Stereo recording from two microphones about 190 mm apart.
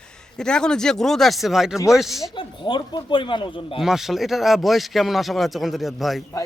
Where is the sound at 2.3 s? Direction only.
25° left (ahead or behind).